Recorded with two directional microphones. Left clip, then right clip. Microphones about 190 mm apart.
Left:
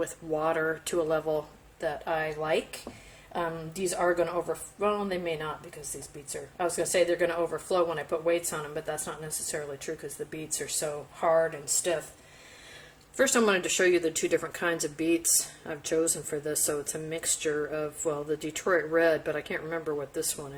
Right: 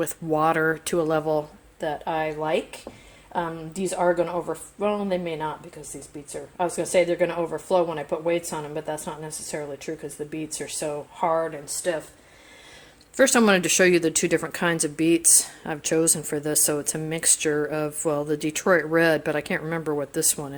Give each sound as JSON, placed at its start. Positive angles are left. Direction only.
{"t": 0.0, "sound": "a woman's voice", "side_deg": -55}
{"t": 3.8, "sound": "a woman's voice", "side_deg": -30}
{"t": 6.6, "sound": "a woman's voice", "side_deg": -30}
{"t": 13.1, "sound": "speech", "side_deg": -45}